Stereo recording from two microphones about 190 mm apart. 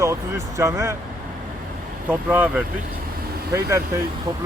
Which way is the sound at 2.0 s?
10° right (ahead or behind).